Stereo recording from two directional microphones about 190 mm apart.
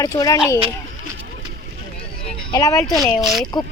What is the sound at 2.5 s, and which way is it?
Speech, 20° left (ahead or behind).